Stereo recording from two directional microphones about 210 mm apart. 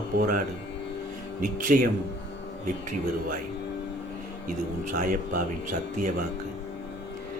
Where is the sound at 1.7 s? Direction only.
40° right (ahead or behind).